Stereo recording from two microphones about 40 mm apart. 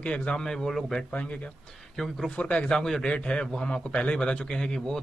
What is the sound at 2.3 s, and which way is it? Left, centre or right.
A man's voice, left.